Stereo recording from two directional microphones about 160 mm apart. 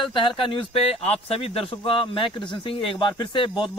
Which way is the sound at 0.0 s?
30° left (ahead or behind).